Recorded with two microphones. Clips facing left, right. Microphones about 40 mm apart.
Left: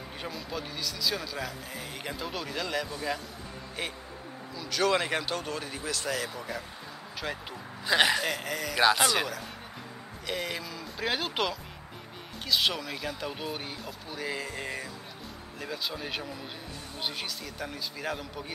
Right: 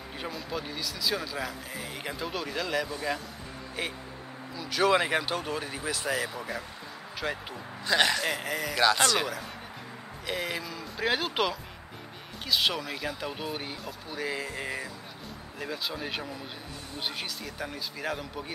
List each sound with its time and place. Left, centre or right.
0.2 s speech: centre
4.6 s speech: centre
7.8 s speech: centre
8.3 s speech: centre